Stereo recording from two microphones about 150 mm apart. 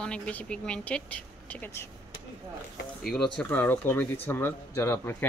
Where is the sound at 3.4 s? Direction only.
15° left (ahead or behind).